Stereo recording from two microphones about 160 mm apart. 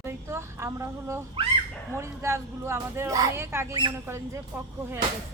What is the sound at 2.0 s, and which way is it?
Speech, 15° right (ahead or behind).